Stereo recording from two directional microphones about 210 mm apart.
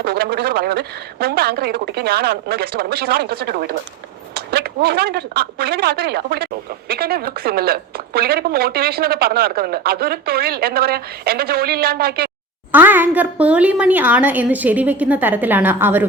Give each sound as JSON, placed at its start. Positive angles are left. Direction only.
{"t": 0.0, "sound": "speech", "side_deg": -50}
{"t": 12.7, "sound": "speech", "side_deg": -10}